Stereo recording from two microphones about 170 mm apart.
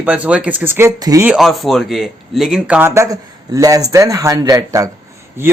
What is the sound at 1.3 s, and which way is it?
Speech, centre (ahead or behind).